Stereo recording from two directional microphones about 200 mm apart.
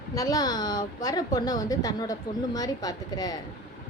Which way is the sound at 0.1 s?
15° left (ahead or behind).